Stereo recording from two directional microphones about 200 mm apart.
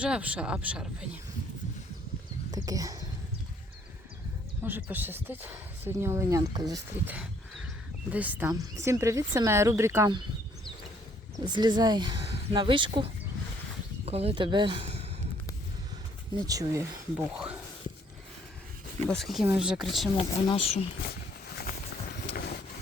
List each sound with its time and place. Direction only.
0.0 s speech: 5° right (ahead or behind)
2.5 s a sound: 20° right (ahead or behind)
4.6 s speech: 10° right (ahead or behind)
11.4 s speech: 20° right (ahead or behind)
16.5 s speech: 15° right (ahead or behind)
17.3 s speech: 5° right (ahead or behind)
19.0 s speech: centre (ahead or behind)
20.1 s speech: 30° left (ahead or behind)